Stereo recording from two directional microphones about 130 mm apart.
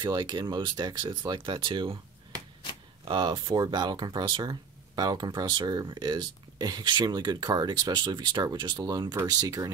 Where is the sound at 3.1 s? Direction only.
40° right (ahead or behind).